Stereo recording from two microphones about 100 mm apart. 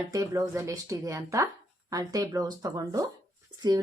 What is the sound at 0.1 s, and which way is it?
Speech, 30° right (ahead or behind).